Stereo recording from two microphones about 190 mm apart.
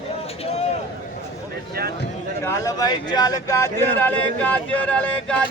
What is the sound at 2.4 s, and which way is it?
Speech, 15° left (ahead or behind).